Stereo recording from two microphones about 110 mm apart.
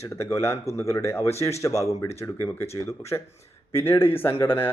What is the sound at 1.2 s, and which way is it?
Speech, 70° left (ahead or behind).